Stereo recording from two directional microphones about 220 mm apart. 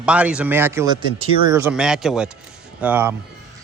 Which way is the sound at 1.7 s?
5° right (ahead or behind).